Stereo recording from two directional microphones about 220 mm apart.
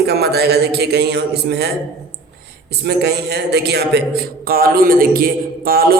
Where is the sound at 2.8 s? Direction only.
50° right (ahead or behind).